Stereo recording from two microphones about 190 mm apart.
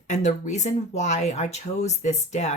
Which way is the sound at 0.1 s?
40° left (ahead or behind).